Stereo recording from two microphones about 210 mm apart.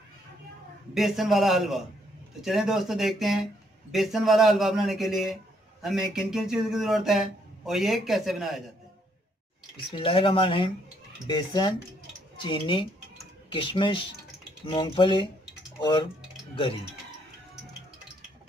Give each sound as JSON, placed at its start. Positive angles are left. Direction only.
{"t": 0.9, "sound": "a man's voice", "side_deg": 0}
{"t": 9.9, "sound": "speech", "side_deg": 25}